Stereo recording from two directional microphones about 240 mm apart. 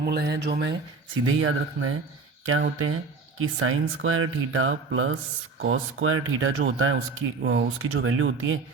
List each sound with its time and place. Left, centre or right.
0.0 s speech: right
1.4 s speech: right